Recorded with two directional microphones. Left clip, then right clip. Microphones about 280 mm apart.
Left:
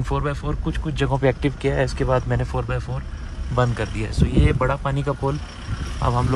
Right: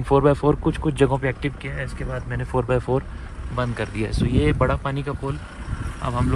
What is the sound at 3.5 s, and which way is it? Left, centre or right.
Speech, centre.